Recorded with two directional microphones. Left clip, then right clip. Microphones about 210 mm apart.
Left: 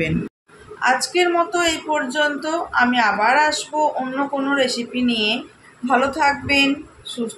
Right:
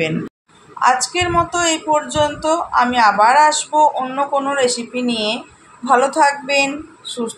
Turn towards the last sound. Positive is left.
turn(degrees=-15)  # may be behind; listen again after turning